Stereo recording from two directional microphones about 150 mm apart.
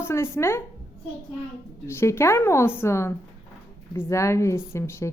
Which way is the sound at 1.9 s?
15° left (ahead or behind).